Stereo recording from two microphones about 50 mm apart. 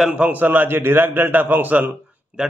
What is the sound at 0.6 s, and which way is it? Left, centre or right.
A man's voice, right.